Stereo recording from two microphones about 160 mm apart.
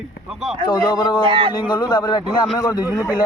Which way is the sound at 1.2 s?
35° right (ahead or behind).